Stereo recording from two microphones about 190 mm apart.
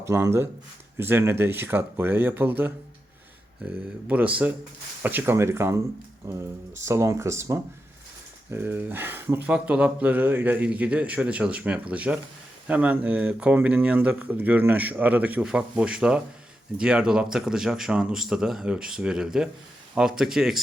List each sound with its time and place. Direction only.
0.0 s speech: 15° right (ahead or behind)